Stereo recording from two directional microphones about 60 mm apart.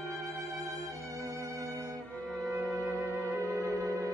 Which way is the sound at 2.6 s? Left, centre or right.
Left.